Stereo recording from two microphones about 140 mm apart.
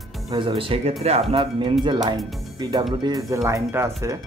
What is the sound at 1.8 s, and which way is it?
Speech, 30° right (ahead or behind).